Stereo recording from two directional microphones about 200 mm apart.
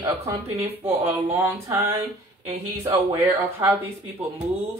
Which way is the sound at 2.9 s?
10° right (ahead or behind).